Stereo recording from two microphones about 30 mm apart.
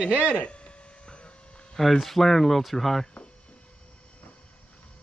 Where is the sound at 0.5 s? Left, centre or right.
Left.